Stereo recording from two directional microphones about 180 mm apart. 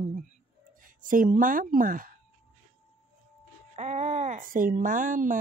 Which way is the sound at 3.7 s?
40° right (ahead or behind).